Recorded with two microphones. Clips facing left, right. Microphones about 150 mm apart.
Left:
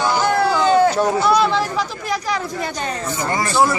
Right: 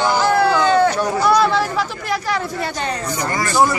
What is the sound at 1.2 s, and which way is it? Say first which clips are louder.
Chatter: right 1 dB; centre (ahead or behind).